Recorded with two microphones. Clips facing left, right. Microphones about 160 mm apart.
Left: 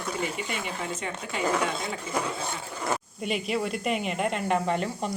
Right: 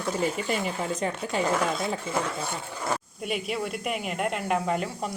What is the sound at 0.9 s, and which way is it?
Speech, 35° right (ahead or behind).